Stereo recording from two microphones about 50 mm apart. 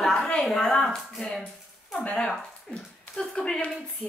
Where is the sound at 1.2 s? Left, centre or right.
Centre.